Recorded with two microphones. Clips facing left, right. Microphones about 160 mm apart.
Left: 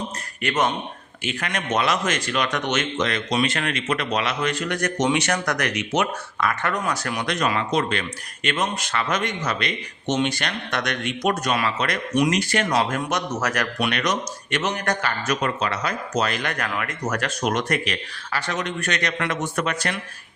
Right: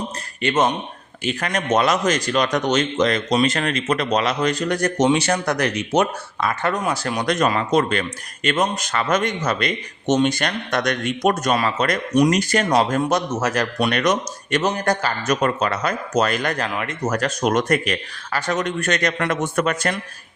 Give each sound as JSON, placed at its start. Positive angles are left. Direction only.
{"t": 0.4, "sound": "speech", "side_deg": -25}
{"t": 1.2, "sound": "a man's voice", "side_deg": -35}
{"t": 7.3, "sound": "a man's voice", "side_deg": -40}
{"t": 15.4, "sound": "speech", "side_deg": -45}
{"t": 16.6, "sound": "speech", "side_deg": -25}
{"t": 17.2, "sound": "speech", "side_deg": -40}